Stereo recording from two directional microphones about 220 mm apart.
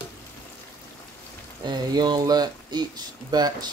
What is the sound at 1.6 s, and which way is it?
Speech, 20° right (ahead or behind).